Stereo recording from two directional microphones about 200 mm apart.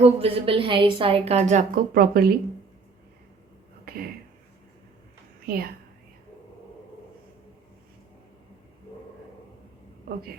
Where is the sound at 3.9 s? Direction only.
50° right (ahead or behind).